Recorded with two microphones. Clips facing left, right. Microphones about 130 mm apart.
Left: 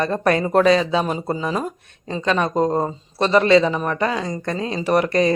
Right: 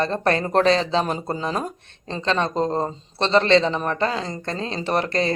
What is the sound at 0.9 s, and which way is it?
Speech, 10° left (ahead or behind).